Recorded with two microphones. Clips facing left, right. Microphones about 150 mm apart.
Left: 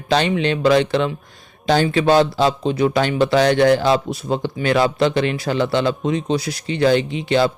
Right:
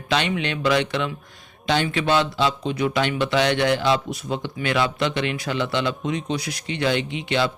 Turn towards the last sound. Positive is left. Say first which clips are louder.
# left 6 dB
turn(degrees=35)  # may be behind; listen again after turning